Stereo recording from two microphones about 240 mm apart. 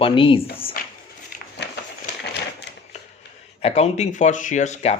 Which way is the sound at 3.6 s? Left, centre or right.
Left.